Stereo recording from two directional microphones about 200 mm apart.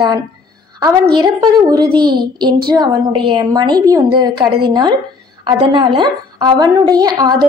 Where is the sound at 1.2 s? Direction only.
20° right (ahead or behind).